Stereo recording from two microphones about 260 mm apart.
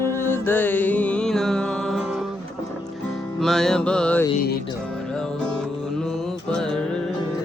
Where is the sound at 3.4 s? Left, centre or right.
Centre.